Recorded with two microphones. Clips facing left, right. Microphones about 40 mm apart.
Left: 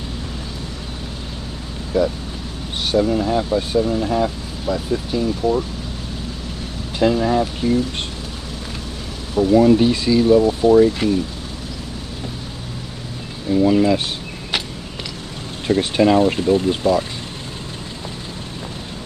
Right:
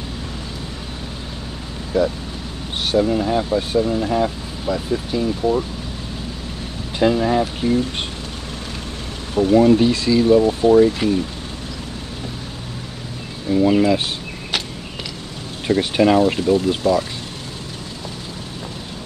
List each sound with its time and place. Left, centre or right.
1.9 s speech: centre
7.0 s speech: centre
9.3 s speech: right
9.7 s speech: centre
10.4 s speech: right
10.8 s speech: centre
13.5 s speech: centre
14.5 s a sound: centre
15.6 s speech: centre
16.5 s speech: left